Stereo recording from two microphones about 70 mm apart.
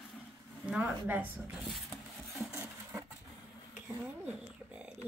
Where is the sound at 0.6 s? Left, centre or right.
Centre.